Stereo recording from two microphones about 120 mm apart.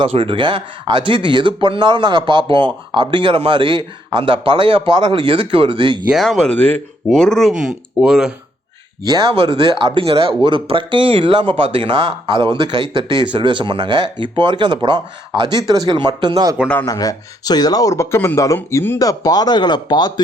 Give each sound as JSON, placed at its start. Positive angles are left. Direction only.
{"t": 0.0, "sound": "speech", "side_deg": -45}
{"t": 6.1, "sound": "speech", "side_deg": 0}
{"t": 9.0, "sound": "speech", "side_deg": -30}
{"t": 16.8, "sound": "speech", "side_deg": 30}